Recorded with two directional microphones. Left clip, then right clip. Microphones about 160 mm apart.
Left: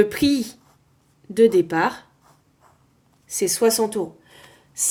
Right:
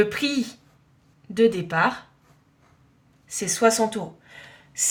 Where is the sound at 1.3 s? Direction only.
40° left (ahead or behind).